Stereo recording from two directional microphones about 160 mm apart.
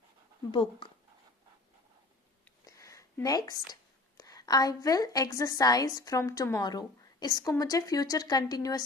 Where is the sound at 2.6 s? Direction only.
20° left (ahead or behind).